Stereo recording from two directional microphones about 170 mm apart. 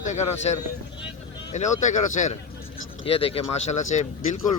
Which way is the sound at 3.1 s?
35° left (ahead or behind).